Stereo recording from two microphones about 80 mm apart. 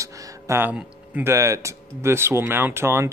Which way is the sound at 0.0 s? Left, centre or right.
Right.